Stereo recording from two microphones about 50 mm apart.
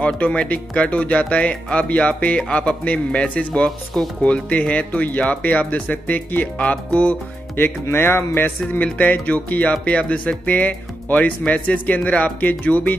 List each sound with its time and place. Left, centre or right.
0.0 s speech: left
3.5 s speech: centre
4.2 s speech: left
7.5 s music: left
8.8 s speech: left